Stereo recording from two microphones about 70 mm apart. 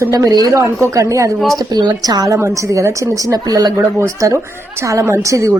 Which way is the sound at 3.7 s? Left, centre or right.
Right.